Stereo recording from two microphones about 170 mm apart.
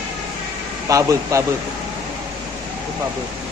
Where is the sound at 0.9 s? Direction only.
20° right (ahead or behind).